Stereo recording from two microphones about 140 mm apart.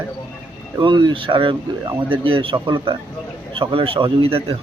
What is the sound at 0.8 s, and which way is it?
A man's voice, 35° right (ahead or behind).